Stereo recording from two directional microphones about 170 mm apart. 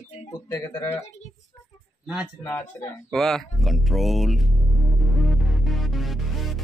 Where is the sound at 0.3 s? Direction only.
20° left (ahead or behind).